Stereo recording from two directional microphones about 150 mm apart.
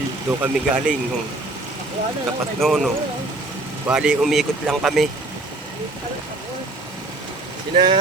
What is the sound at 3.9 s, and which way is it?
Speech, 5° right (ahead or behind).